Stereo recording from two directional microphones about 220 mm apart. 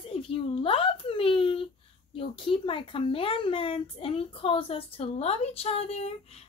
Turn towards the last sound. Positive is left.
turn(degrees=30)  # may be behind; listen again after turning